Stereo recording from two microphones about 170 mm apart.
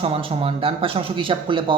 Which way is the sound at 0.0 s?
35° right (ahead or behind).